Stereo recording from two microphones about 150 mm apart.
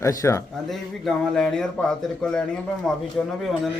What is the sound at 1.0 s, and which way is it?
Speech, 5° left (ahead or behind).